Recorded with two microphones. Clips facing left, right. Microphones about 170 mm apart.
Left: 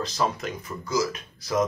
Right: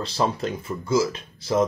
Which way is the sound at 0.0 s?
30° right (ahead or behind).